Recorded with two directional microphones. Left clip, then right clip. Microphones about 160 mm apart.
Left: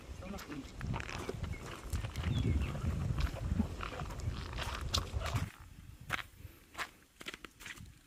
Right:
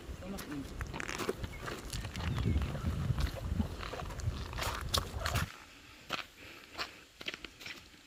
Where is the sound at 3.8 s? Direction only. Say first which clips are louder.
Right 1 dB; 35° right (ahead or behind).